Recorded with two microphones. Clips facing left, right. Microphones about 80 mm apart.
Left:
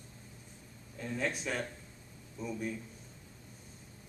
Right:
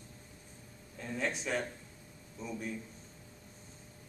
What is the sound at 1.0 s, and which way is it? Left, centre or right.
Speech, centre.